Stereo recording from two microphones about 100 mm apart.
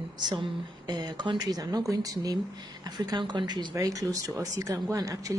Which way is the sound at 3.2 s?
50° right (ahead or behind).